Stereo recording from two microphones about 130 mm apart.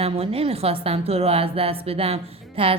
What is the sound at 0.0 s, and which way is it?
A woman's voice, 45° right (ahead or behind).